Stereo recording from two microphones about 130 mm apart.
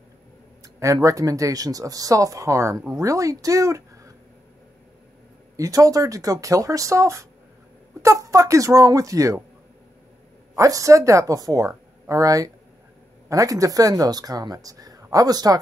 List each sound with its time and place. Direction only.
0.9 s speech: 25° right (ahead or behind)
5.6 s speech: 25° right (ahead or behind)
10.5 s speech: 25° right (ahead or behind)